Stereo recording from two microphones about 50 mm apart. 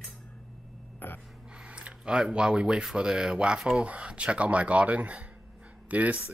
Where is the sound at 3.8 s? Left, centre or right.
Right.